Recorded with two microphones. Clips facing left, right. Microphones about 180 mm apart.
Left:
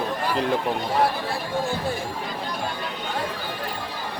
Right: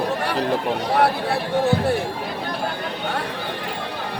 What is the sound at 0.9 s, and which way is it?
Speech, 65° right (ahead or behind).